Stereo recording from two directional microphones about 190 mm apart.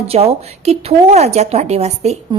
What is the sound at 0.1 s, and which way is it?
A woman's voice, 30° right (ahead or behind).